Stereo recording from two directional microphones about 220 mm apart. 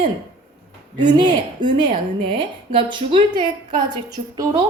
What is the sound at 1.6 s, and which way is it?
Speech, 35° right (ahead or behind).